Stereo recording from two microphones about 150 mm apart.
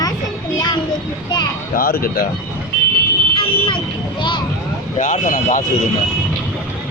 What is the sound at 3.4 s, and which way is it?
Speech, 35° left (ahead or behind).